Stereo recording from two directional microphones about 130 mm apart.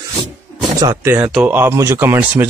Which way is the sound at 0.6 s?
30° right (ahead or behind).